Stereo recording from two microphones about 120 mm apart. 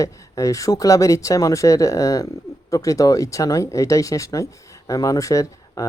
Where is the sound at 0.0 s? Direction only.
30° left (ahead or behind).